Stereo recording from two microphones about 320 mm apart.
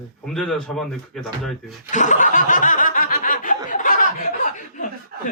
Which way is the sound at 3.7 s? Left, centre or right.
Left.